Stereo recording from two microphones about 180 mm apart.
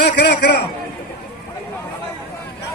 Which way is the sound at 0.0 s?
65° left (ahead or behind).